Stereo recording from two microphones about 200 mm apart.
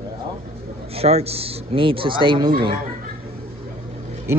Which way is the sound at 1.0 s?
30° right (ahead or behind).